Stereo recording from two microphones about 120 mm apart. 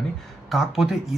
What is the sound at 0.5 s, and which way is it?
Speech, centre (ahead or behind).